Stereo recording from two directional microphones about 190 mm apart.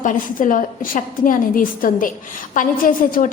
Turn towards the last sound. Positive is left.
turn(degrees=45)  # may be behind; listen again after turning